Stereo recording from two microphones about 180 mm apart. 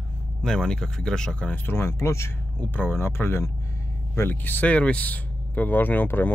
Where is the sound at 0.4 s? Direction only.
5° left (ahead or behind).